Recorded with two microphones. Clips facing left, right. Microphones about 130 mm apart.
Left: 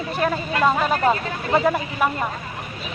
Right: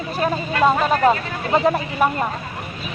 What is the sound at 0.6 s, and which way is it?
Speech, 25° right (ahead or behind).